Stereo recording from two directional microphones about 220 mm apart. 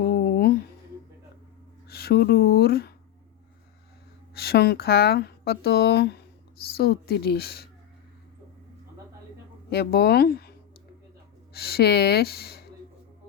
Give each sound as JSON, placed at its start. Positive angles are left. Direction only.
{"t": 0.1, "sound": "a sound", "side_deg": 45}
{"t": 1.9, "sound": "speech", "side_deg": 45}
{"t": 4.4, "sound": "speech", "side_deg": 45}
{"t": 9.6, "sound": "speech", "side_deg": 50}
{"t": 11.5, "sound": "speech", "side_deg": 45}